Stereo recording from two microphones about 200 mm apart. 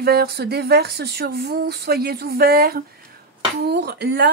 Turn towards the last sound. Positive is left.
turn(degrees=-55)  # may be behind; listen again after turning